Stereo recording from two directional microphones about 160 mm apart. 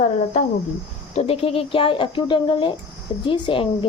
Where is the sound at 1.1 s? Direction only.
40° left (ahead or behind).